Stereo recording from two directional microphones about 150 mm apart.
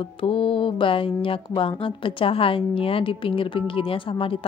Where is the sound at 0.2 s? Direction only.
35° left (ahead or behind).